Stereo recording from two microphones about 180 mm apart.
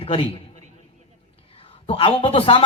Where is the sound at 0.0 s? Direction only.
30° left (ahead or behind).